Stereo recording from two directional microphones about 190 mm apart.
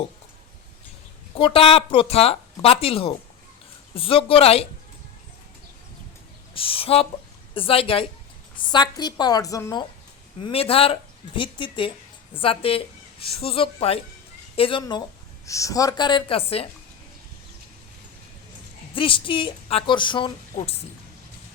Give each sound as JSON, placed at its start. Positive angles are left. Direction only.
{"t": 1.4, "sound": "speech", "side_deg": 30}
{"t": 6.5, "sound": "speech", "side_deg": 30}
{"t": 10.4, "sound": "speech", "side_deg": 30}
{"t": 18.9, "sound": "speech", "side_deg": 25}